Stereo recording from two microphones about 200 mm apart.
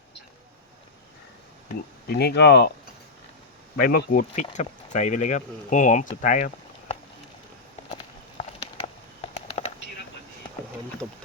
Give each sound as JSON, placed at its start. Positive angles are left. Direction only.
{"t": 2.0, "sound": "speech", "side_deg": 55}
{"t": 3.8, "sound": "speech", "side_deg": 45}
{"t": 9.2, "sound": "a sound", "side_deg": 30}